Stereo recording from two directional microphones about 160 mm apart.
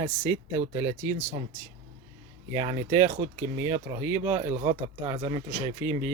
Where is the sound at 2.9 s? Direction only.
15° right (ahead or behind).